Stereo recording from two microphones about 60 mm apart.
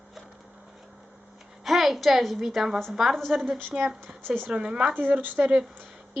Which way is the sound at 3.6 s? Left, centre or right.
Right.